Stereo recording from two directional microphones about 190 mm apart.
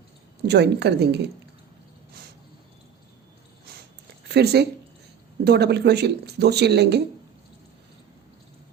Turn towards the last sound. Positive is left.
turn(degrees=-60)  # may be behind; listen again after turning